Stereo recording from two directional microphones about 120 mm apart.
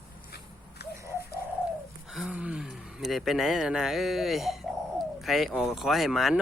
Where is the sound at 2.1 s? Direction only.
10° right (ahead or behind).